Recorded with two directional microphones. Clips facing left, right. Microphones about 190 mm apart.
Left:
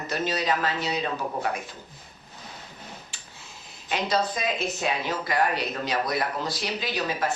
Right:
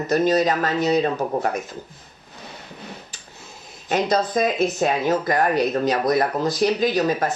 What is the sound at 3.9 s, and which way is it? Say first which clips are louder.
Speech: right 5 dB; 45° right (ahead or behind).